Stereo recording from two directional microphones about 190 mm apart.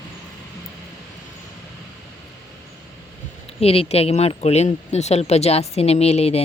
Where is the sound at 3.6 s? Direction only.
30° left (ahead or behind).